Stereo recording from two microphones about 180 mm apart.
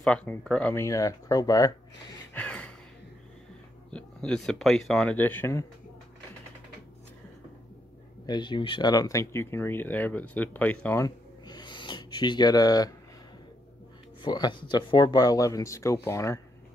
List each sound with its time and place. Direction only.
0.0 s speech: 5° left (ahead or behind)
2.3 s gasp: 5° left (ahead or behind)
3.9 s speech: 5° left (ahead or behind)
8.3 s speech: 25° left (ahead or behind)
14.2 s speech: 25° left (ahead or behind)